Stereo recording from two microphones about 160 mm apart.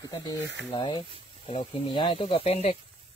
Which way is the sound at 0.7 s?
35° left (ahead or behind).